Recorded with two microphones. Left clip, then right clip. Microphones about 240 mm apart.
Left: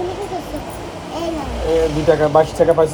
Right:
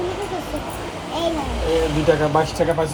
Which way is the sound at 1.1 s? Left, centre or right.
Right.